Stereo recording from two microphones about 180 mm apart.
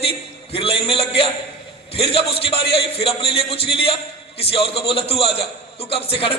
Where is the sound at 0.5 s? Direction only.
30° left (ahead or behind).